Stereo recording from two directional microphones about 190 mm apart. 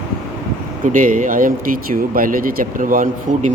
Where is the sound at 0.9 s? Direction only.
45° right (ahead or behind).